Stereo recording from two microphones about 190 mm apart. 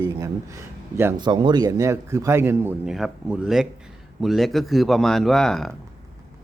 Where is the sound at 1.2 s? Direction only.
25° right (ahead or behind); by 5.7 s centre (ahead or behind).